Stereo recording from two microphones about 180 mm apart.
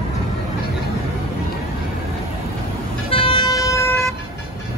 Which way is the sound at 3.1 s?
30° left (ahead or behind).